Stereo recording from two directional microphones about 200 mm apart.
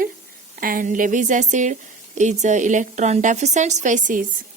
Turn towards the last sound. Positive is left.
turn(degrees=-40)  # may be behind; listen again after turning